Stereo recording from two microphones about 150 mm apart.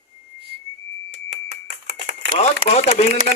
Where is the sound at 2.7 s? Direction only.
45° left (ahead or behind).